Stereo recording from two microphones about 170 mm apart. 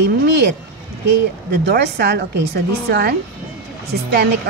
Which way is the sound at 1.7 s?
85° right.